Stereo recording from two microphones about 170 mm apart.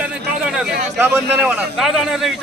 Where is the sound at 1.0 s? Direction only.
10° right (ahead or behind).